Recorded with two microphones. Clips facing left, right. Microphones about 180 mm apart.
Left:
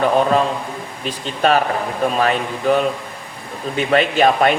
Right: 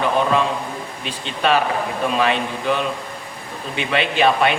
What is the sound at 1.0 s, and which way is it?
Speech, 40° left (ahead or behind).